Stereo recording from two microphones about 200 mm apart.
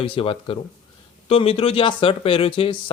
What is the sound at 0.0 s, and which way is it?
Speech, 25° left (ahead or behind).